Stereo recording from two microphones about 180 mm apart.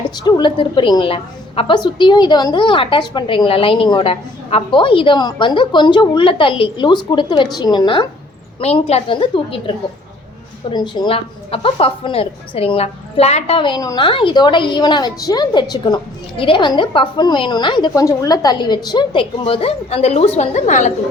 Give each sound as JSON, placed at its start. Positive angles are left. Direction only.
{"t": 0.3, "sound": "a woman's voice", "side_deg": 25}
{"t": 8.6, "sound": "a woman's voice", "side_deg": 35}